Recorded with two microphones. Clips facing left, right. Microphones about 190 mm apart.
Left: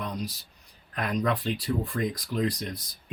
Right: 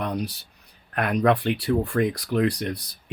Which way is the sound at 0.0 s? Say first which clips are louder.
Right 6 dB; 65° right (ahead or behind).